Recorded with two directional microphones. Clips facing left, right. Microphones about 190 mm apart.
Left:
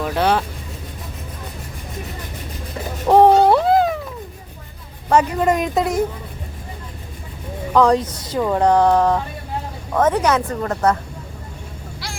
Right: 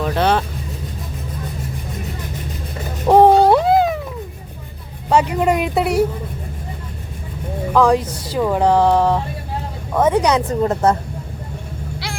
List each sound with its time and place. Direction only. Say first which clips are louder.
0.0 s speech: right 1 dB; 5° left (ahead or behind)
3.1 s a sound: right 1 dB; 5° right (ahead or behind)
5.0 s a woman's voice: even; 15° right (ahead or behind)
7.7 s a woman's voice: even; 5° right (ahead or behind); by 10.9 s 25° right (ahead or behind)